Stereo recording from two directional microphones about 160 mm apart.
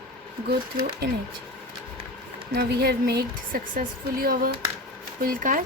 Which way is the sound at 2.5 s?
80° right.